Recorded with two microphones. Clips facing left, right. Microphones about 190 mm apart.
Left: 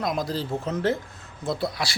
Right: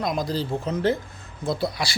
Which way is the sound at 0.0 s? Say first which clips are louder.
Right 1 dB; centre (ahead or behind).